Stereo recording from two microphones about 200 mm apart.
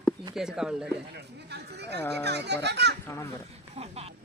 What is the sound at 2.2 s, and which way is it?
Speech, 55° right (ahead or behind).